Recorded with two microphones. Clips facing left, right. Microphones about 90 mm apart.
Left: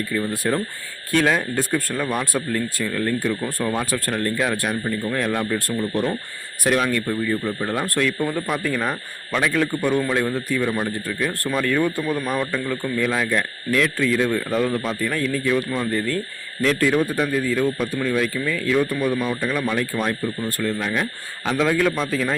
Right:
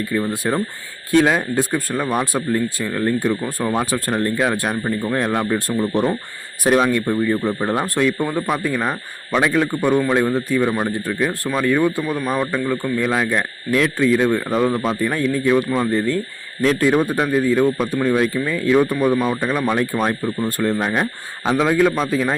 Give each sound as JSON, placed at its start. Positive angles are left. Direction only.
{"t": 0.2, "sound": "a man's voice", "side_deg": -20}
{"t": 4.7, "sound": "speech", "side_deg": -40}
{"t": 5.0, "sound": "a man's voice", "side_deg": -25}
{"t": 12.5, "sound": "a man's voice", "side_deg": -5}
{"t": 20.6, "sound": "speech", "side_deg": -35}
{"t": 21.4, "sound": "a man's voice", "side_deg": -20}